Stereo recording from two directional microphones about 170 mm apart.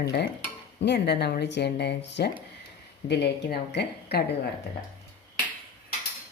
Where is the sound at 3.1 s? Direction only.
70° left (ahead or behind).